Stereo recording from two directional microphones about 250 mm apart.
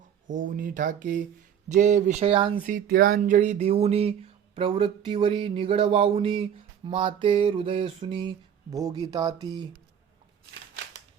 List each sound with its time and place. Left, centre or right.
0.3 s speech: right; by 9.6 s centre